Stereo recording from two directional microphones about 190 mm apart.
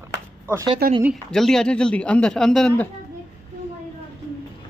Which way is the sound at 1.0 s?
Centre (ahead or behind).